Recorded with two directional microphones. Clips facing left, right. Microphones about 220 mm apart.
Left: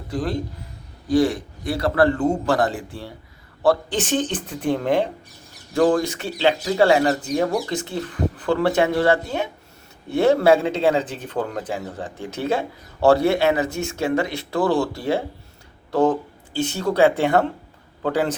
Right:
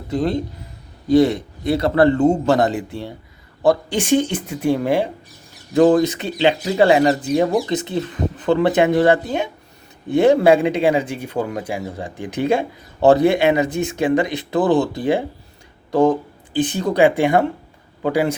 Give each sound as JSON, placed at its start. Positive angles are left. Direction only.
{"t": 0.1, "sound": "speech", "side_deg": -25}
{"t": 5.7, "sound": "speech", "side_deg": -20}